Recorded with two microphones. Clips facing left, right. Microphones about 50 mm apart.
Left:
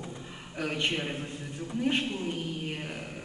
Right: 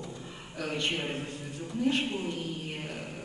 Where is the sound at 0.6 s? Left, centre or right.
Left.